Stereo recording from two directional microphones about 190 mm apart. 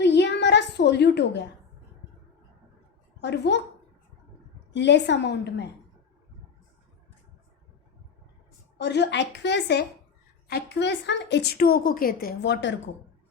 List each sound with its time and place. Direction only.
0.0 s a sound: 65° left (ahead or behind)
3.2 s a woman's voice: 65° left (ahead or behind)
4.7 s a woman's voice: 65° left (ahead or behind)
8.8 s a woman's voice: 65° left (ahead or behind)